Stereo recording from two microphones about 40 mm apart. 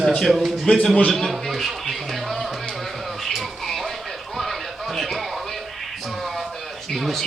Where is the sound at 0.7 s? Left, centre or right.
Left.